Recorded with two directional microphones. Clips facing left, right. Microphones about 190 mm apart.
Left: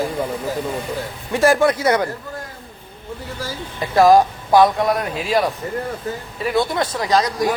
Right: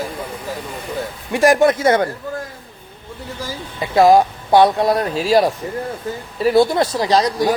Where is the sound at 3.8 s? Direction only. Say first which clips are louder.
Right 1 dB; 20° right (ahead or behind).